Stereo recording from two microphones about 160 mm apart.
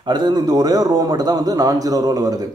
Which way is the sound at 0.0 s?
25° right (ahead or behind).